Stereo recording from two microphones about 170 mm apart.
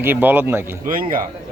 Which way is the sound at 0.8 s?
55° right (ahead or behind).